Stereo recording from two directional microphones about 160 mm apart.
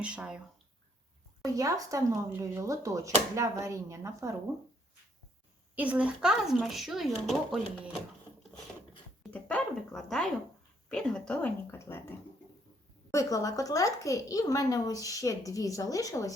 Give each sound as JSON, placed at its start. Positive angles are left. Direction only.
{"t": 0.0, "sound": "speech", "side_deg": -5}
{"t": 1.5, "sound": "speech", "side_deg": -20}
{"t": 5.7, "sound": "speech", "side_deg": -10}
{"t": 9.2, "sound": "speech", "side_deg": 5}
{"t": 13.1, "sound": "speech", "side_deg": 20}